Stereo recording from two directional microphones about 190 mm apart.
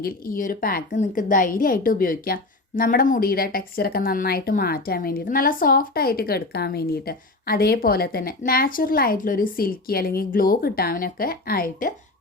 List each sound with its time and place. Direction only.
0.0 s a woman's voice: 45° left (ahead or behind)